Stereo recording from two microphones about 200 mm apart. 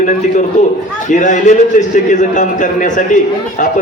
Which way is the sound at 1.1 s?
40° left (ahead or behind).